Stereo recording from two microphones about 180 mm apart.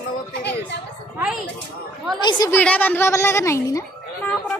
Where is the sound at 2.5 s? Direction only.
10° left (ahead or behind).